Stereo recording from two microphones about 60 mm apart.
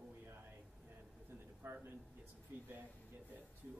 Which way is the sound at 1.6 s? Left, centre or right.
Right.